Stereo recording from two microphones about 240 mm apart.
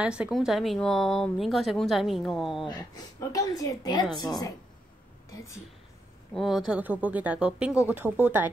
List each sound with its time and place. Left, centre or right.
0.0 s a woman's voice: centre
2.6 s a woman's voice: centre
5.3 s a woman's voice: centre
6.3 s a woman's voice: centre